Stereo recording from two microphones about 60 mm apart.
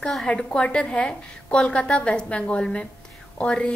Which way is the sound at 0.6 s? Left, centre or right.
Centre.